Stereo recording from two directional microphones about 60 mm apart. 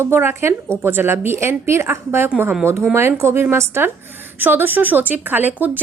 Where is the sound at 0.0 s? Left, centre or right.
Right.